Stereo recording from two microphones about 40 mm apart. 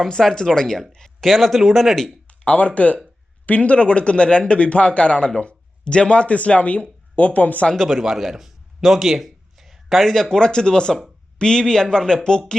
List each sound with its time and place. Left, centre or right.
0.1 s speech: centre
2.2 s speech: left
7.9 s speech: centre
10.0 s speech: centre